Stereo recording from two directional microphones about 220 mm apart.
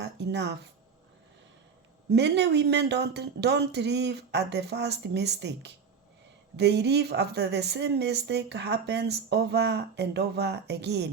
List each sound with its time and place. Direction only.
0.0 s speech: 50° right (ahead or behind)
2.0 s speech: 50° right (ahead or behind)